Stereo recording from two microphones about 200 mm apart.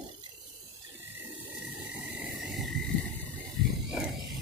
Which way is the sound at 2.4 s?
Centre (ahead or behind).